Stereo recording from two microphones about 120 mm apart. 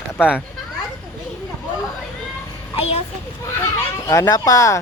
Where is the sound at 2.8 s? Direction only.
60° left (ahead or behind).